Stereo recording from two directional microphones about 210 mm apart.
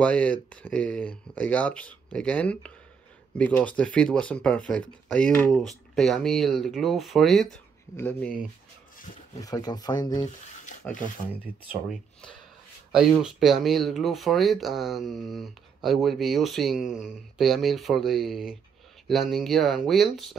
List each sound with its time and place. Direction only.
0.0 s speech: 5° left (ahead or behind)
9.4 s speech: 20° left (ahead or behind)
10.8 s speech: 5° left (ahead or behind)